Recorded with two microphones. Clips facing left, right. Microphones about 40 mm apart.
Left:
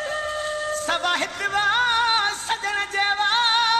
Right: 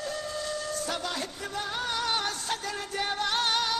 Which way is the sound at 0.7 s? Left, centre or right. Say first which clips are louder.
Left 9 dB; left.